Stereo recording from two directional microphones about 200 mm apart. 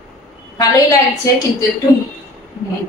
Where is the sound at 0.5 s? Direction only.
15° left (ahead or behind).